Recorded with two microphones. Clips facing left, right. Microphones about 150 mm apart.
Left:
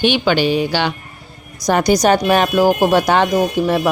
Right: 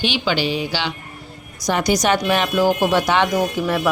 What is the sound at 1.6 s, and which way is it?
Speech, 40° left (ahead or behind).